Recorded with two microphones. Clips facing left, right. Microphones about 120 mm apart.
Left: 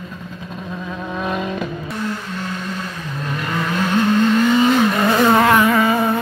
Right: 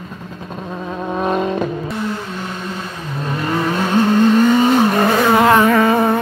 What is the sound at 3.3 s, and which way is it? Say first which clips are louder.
Vehicle: right 4 dB; 30° right (ahead or behind).